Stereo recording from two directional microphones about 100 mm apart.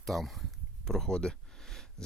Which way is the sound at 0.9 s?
5° left (ahead or behind).